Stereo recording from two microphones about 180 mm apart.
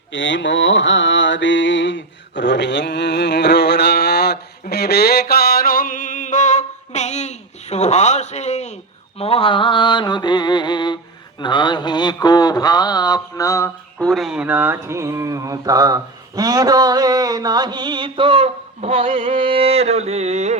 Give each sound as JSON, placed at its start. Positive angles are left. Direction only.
{"t": 0.1, "sound": "mantra", "side_deg": 90}
{"t": 11.3, "sound": "speech", "side_deg": 25}
{"t": 14.0, "sound": "mantra", "side_deg": 0}